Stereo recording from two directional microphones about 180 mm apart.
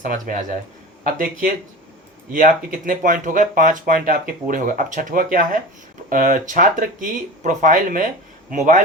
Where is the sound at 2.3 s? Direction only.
50° right (ahead or behind).